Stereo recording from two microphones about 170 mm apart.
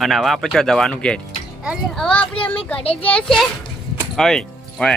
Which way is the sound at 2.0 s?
5° left (ahead or behind).